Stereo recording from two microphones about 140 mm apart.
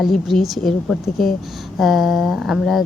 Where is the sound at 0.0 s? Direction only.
Centre (ahead or behind).